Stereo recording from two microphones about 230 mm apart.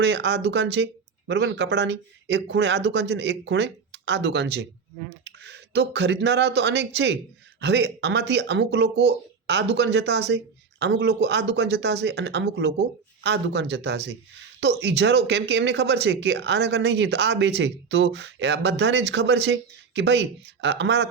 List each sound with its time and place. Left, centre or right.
0.0 s speech: right